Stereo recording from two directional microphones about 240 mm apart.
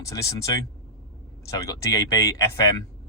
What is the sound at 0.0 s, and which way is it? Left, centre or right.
Speech, centre.